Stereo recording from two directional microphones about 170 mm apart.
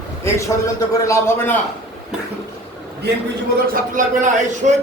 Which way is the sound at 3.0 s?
75° right (ahead or behind).